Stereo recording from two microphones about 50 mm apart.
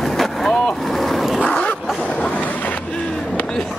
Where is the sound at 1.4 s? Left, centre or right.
Left.